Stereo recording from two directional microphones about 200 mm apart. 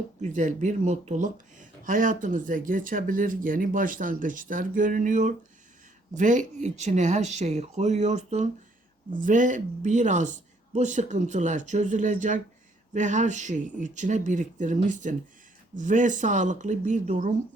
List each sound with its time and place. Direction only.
0.2 s speech: 35° right (ahead or behind)